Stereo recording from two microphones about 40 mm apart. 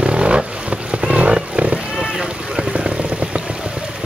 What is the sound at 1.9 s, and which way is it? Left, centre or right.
Boat, centre.